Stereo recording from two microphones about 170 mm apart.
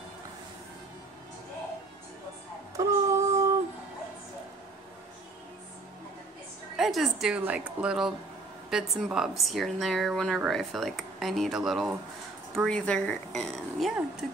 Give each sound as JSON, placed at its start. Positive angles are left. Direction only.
{"t": 2.8, "sound": "child singing", "side_deg": -15}
{"t": 6.8, "sound": "speech", "side_deg": 0}